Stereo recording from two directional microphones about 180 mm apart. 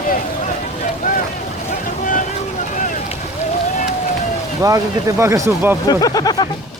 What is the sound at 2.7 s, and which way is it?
Boat, 45° left (ahead or behind).